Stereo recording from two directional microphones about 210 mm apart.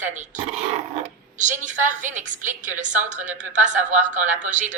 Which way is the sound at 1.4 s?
35° right (ahead or behind).